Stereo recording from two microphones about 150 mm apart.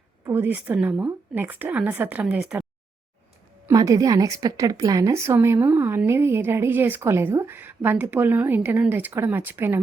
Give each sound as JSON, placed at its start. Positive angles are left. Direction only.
{"t": 0.3, "sound": "a woman's voice", "side_deg": -15}
{"t": 3.7, "sound": "a woman's voice", "side_deg": -20}